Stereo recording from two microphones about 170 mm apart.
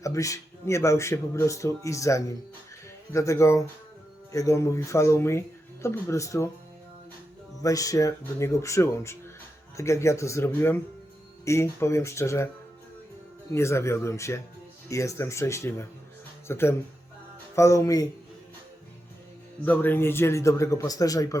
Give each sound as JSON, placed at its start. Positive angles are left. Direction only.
{"t": 0.0, "sound": "speech", "side_deg": 20}
{"t": 7.6, "sound": "speech", "side_deg": 20}
{"t": 13.5, "sound": "speech", "side_deg": 15}
{"t": 19.6, "sound": "speech", "side_deg": 10}